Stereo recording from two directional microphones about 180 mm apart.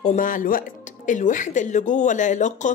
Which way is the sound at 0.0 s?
45° left (ahead or behind).